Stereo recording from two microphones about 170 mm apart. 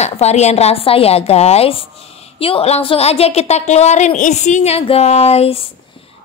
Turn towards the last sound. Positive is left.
turn(degrees=35)  # may be behind; listen again after turning